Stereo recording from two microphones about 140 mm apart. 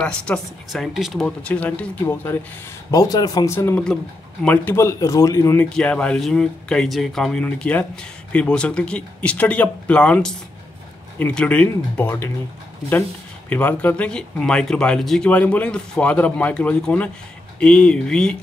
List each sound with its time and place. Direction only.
0.0 s speech: 5° left (ahead or behind)
1.2 s speech: 10° left (ahead or behind)
2.9 s speech: 25° left (ahead or behind)
5.7 s speech: 5° left (ahead or behind)
13.5 s speech: 10° left (ahead or behind)